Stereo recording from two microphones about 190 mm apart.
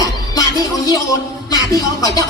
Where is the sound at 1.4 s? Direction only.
20° left (ahead or behind).